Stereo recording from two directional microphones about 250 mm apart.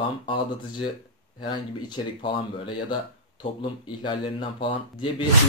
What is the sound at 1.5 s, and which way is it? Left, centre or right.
Speech, centre.